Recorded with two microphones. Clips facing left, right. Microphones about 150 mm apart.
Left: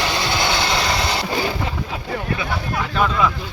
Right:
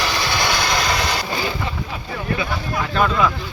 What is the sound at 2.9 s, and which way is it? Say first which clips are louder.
Speech: right 1 dB; centre (ahead or behind).